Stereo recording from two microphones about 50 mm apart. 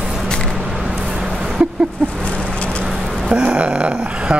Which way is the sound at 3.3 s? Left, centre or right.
Right.